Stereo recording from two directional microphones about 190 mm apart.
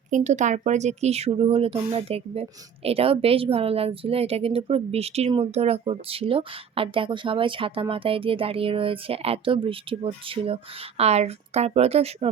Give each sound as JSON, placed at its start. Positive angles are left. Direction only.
{"t": 0.1, "sound": "speech", "side_deg": -40}